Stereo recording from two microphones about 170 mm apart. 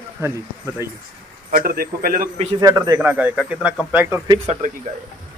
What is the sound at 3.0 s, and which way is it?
Speech, 10° right (ahead or behind).